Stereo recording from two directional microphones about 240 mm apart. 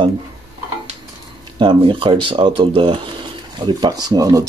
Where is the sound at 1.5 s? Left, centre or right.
Right.